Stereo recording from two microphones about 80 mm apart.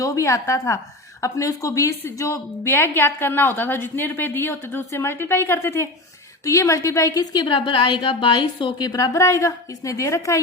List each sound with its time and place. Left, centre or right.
0.0 s a woman's voice: left
2.7 s a woman's voice: left
6.4 s a woman's voice: left
7.4 s a woman's voice: left
9.1 s a woman's voice: left